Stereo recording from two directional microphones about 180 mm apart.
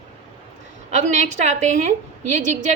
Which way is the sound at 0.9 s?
40° right (ahead or behind).